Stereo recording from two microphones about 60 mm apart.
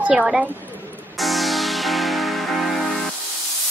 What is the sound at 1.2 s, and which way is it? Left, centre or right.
Music, centre.